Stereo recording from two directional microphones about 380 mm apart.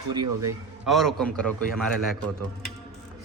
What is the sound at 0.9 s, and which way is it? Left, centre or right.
Speech, centre.